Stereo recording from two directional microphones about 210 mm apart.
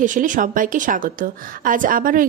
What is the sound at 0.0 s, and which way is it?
A woman's voice, 40° right (ahead or behind).